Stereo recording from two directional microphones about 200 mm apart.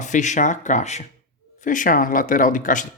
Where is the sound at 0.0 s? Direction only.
35° left (ahead or behind).